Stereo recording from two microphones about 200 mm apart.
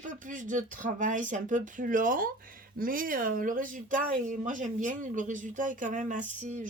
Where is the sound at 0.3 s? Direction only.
40° right (ahead or behind).